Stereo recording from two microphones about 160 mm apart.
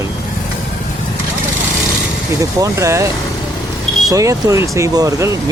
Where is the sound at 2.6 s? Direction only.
20° right (ahead or behind).